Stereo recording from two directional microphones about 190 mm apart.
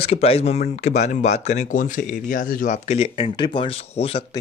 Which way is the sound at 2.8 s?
30° left (ahead or behind).